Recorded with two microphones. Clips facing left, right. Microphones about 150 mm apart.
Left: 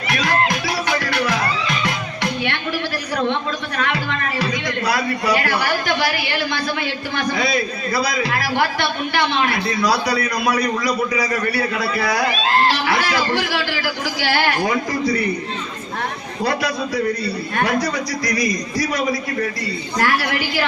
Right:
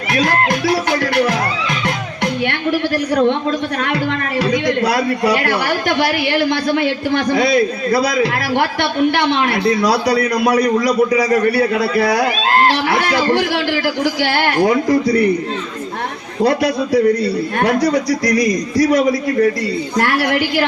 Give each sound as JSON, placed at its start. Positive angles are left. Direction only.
{"t": 0.9, "sound": "speech", "side_deg": -50}
{"t": 3.8, "sound": "a man's voice", "side_deg": -55}
{"t": 6.0, "sound": "a man's voice", "side_deg": -60}
{"t": 10.1, "sound": "a man's voice", "side_deg": -35}
{"t": 10.8, "sound": "a man's voice", "side_deg": -65}
{"t": 12.9, "sound": "a man's voice", "side_deg": -55}
{"t": 18.3, "sound": "a man's voice", "side_deg": -65}